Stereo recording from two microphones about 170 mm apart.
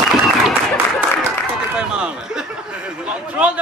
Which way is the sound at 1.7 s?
5° right (ahead or behind).